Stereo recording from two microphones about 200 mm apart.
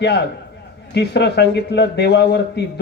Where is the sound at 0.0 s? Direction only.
55° left (ahead or behind).